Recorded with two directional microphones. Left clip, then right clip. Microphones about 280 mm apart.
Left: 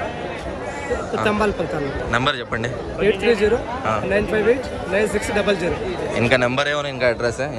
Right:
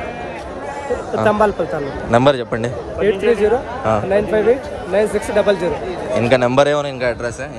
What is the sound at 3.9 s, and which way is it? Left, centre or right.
A man's voice, centre.